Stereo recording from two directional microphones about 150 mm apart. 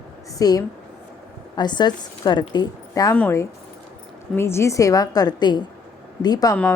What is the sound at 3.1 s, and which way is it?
A woman's voice, 10° left (ahead or behind).